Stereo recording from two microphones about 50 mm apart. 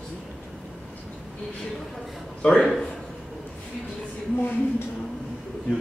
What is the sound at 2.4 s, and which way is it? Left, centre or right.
Speech, centre.